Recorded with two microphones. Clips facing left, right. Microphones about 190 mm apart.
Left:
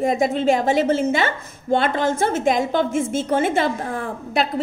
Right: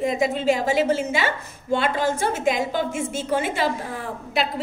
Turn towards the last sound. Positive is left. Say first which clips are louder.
# left 3 dB
turn(degrees=50)  # may be behind; listen again after turning